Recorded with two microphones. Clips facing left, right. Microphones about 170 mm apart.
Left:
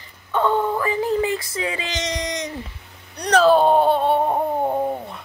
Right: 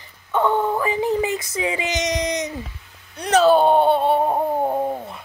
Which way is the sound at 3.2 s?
Centre (ahead or behind).